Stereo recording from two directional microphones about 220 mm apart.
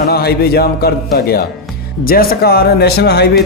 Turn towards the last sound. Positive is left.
turn(degrees=50)  # may be behind; listen again after turning